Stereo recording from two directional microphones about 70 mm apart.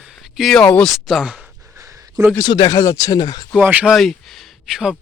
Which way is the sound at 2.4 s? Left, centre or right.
Left.